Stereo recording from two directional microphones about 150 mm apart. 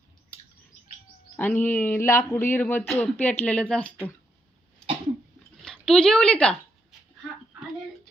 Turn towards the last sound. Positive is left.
turn(degrees=0)  # may be behind; listen again after turning